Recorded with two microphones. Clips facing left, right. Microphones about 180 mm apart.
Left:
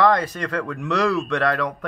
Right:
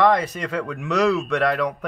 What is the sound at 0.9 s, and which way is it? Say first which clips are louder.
Speech: right 2 dB; 20° right (ahead or behind).